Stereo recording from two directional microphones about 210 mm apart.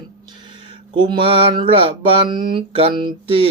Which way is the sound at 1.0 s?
25° right (ahead or behind).